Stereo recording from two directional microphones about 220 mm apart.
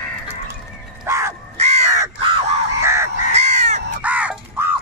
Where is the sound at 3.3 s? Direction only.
30° right (ahead or behind).